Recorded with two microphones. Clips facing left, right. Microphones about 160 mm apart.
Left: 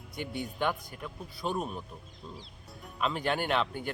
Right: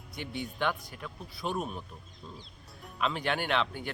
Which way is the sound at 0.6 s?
5° left (ahead or behind).